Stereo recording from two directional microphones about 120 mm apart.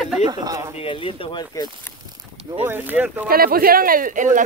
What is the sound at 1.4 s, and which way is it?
Speech, 35° left (ahead or behind).